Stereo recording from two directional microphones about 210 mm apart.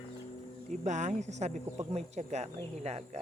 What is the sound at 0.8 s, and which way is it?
Speech, 35° right (ahead or behind).